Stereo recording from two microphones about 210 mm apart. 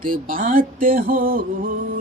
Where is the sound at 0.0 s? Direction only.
40° right (ahead or behind).